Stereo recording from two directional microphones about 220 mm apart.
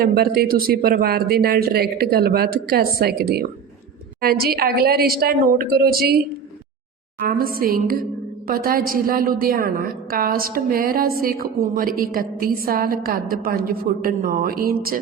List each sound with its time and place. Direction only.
0.0 s speech: 45° right (ahead or behind)
7.3 s a woman's voice: 40° right (ahead or behind)